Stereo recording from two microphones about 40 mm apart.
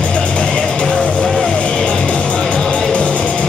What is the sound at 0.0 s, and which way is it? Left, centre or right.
Music, left.